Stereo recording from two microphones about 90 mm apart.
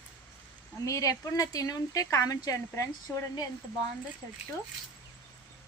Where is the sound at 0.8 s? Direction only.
40° left (ahead or behind).